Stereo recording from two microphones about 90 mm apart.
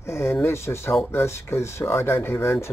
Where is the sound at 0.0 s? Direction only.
30° left (ahead or behind).